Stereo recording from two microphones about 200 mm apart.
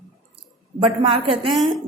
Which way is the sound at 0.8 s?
25° right (ahead or behind).